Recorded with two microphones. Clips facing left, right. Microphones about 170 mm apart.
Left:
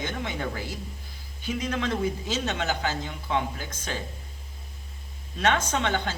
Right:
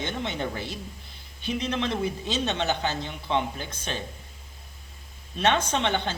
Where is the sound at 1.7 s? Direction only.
25° right (ahead or behind).